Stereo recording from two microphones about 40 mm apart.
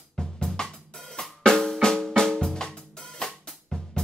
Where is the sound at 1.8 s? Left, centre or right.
Centre.